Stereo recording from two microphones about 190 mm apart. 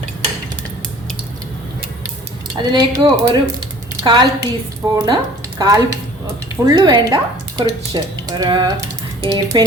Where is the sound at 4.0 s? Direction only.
25° right (ahead or behind).